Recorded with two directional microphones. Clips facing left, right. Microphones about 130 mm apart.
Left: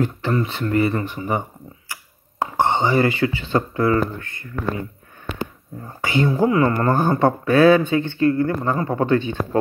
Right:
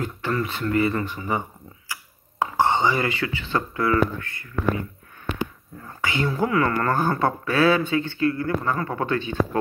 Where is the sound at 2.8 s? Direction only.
35° left (ahead or behind).